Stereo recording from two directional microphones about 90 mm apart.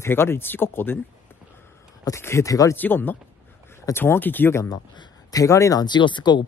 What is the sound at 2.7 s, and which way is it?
Speech, 20° left (ahead or behind).